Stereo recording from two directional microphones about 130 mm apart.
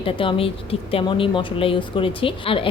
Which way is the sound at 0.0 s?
45° left (ahead or behind).